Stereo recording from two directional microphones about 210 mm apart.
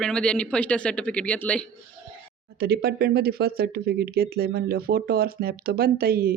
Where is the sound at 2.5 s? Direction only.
50° right (ahead or behind).